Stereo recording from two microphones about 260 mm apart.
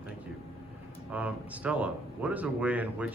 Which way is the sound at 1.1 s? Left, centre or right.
Centre.